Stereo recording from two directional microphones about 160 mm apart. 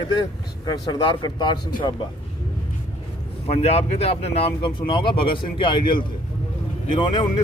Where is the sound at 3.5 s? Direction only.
40° left (ahead or behind).